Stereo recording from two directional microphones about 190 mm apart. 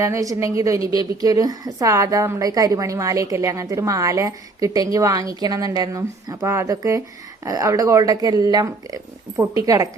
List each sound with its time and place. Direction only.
0.0 s a woman's voice: 15° right (ahead or behind)